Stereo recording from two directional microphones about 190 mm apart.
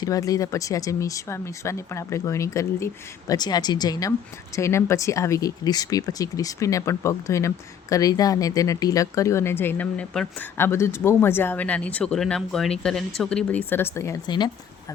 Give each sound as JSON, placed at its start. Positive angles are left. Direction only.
{"t": 0.0, "sound": "speech", "side_deg": 20}